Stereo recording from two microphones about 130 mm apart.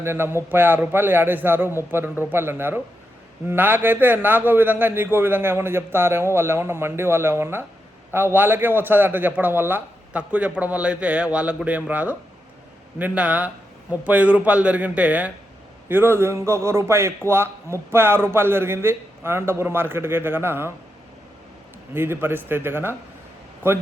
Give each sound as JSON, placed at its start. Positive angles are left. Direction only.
{"t": 0.0, "sound": "a man's voice", "side_deg": -20}
{"t": 21.9, "sound": "a man's voice", "side_deg": -15}